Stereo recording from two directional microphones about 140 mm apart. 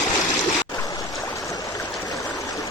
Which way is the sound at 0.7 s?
25° left (ahead or behind).